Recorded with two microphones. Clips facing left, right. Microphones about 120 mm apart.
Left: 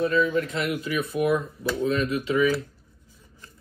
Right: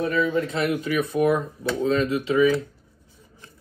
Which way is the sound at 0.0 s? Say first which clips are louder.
Even; 25° right (ahead or behind).